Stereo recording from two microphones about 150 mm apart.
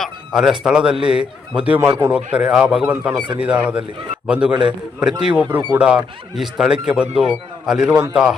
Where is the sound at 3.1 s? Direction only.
30° right (ahead or behind).